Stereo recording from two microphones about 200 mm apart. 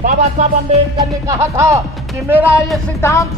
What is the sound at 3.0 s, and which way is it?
Speech, 15° left (ahead or behind).